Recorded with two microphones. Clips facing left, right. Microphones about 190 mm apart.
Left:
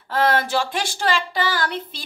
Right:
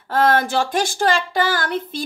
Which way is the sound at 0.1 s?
45° right (ahead or behind).